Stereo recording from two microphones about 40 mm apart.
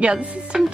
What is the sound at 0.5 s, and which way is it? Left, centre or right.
Speech, centre.